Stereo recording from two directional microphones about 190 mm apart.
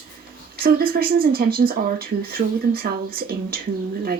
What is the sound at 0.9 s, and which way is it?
Speech, 50° right (ahead or behind).